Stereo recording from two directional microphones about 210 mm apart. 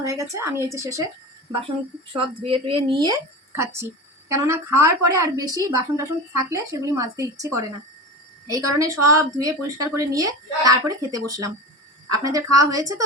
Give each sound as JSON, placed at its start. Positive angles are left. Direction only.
{"t": 0.0, "sound": "a woman's voice", "side_deg": -15}
{"t": 2.1, "sound": "a woman's voice", "side_deg": -25}
{"t": 8.8, "sound": "a woman's voice", "side_deg": -15}